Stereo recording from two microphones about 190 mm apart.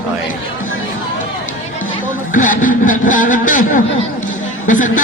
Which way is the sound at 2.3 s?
45° left (ahead or behind).